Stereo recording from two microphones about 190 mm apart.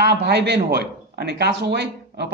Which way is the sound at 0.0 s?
60° right (ahead or behind).